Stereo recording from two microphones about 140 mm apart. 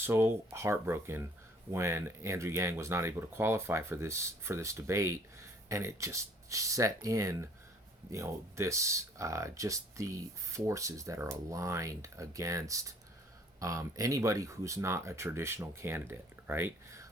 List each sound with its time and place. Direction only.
0.0 s speech: 15° right (ahead or behind)